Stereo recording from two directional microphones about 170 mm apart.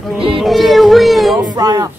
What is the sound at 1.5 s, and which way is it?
Speech, 25° right (ahead or behind).